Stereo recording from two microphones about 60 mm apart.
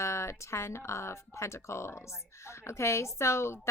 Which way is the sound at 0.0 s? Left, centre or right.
Left.